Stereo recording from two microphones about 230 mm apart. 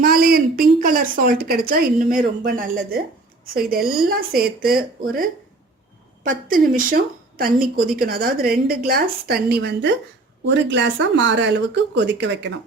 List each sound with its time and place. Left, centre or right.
0.0 s a sound: right
0.8 s a woman's voice: right
6.2 s a woman's voice: right